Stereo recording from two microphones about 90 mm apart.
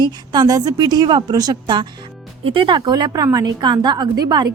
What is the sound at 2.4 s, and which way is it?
Speech, 75° right (ahead or behind).